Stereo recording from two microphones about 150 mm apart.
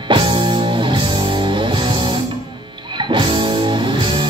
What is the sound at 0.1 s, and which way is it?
Music, 35° right (ahead or behind).